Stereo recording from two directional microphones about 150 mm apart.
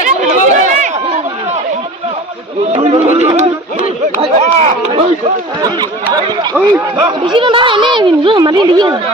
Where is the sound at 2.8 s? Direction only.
45° right (ahead or behind).